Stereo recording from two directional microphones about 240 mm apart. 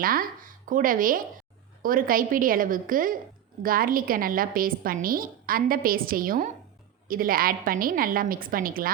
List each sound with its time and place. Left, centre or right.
0.0 s a woman's voice: right